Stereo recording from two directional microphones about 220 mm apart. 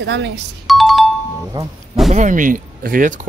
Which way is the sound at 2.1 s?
35° right (ahead or behind).